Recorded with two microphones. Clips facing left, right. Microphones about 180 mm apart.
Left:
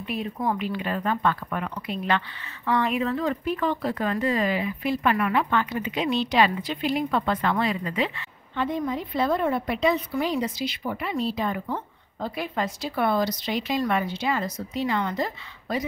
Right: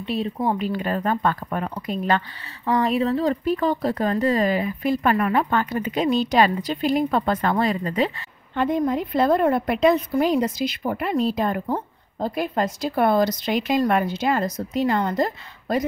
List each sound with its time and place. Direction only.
0.0 s speech: 30° right (ahead or behind)
0.7 s a woman's voice: 40° right (ahead or behind)